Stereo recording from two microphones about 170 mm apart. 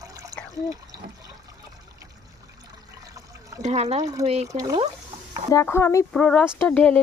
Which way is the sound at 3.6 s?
40° right (ahead or behind).